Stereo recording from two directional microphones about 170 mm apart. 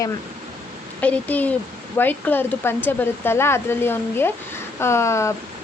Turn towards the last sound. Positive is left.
turn(degrees=15)  # may be behind; listen again after turning